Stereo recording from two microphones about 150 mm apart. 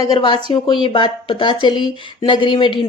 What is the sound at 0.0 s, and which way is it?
Speech, 30° left (ahead or behind).